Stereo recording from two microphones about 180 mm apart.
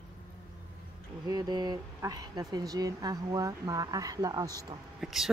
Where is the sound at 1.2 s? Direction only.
20° right (ahead or behind).